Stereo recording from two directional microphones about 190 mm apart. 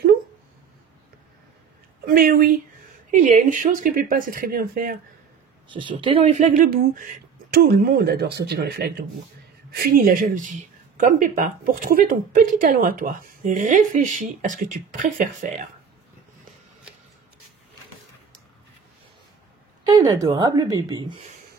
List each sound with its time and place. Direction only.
2.0 s a woman's voice: 50° right (ahead or behind)
3.1 s a woman's voice: 40° right (ahead or behind)
5.7 s a woman's voice: 25° right (ahead or behind); by 15.7 s 45° right (ahead or behind)
20.0 s a woman's voice: 20° right (ahead or behind)